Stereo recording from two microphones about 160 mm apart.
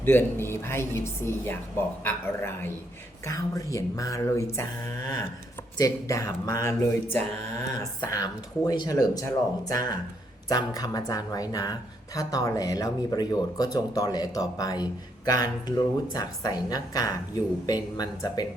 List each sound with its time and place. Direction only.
0.0 s speech: 15° left (ahead or behind)
5.7 s speech: 20° left (ahead or behind)